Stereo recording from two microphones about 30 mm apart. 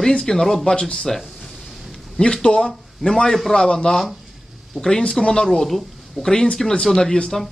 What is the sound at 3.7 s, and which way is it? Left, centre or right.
A man's voice, left.